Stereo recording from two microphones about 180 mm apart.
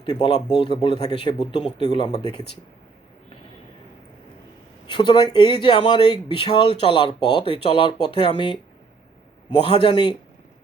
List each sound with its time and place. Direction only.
0.0 s a man's voice: 25° left (ahead or behind)
4.9 s a man's voice: 25° left (ahead or behind)
9.6 s a man's voice: 30° left (ahead or behind)